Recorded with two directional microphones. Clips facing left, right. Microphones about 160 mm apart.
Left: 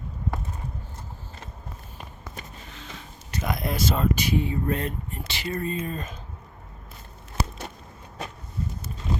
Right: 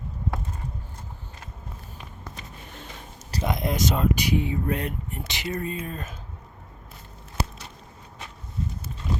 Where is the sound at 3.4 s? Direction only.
20° right (ahead or behind); by 6.2 s 5° right (ahead or behind).